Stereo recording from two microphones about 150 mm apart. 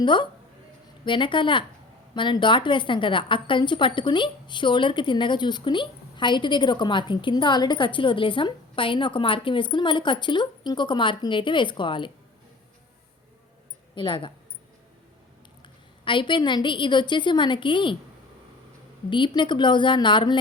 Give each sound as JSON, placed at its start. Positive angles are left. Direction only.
{"t": 0.0, "sound": "a woman's voice", "side_deg": 30}
{"t": 13.9, "sound": "speech", "side_deg": 35}
{"t": 15.6, "sound": "a woman's voice", "side_deg": 35}
{"t": 19.1, "sound": "a woman's voice", "side_deg": 30}